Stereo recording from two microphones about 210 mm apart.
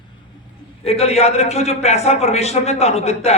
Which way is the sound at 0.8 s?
30° left (ahead or behind).